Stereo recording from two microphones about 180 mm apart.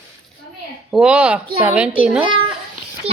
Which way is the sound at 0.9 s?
5° right (ahead or behind).